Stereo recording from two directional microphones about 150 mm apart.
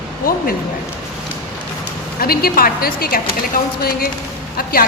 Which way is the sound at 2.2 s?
90° left.